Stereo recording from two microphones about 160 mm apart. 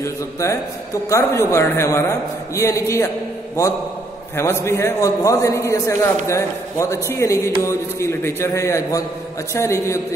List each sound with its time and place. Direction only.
0.0 s a man's voice: 20° left (ahead or behind)
4.4 s a man's voice: 15° left (ahead or behind)